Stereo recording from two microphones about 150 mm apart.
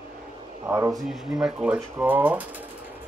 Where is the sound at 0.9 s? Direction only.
Centre (ahead or behind).